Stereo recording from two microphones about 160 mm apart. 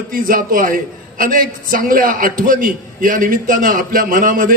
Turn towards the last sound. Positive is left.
turn(degrees=-60)  # may be behind; listen again after turning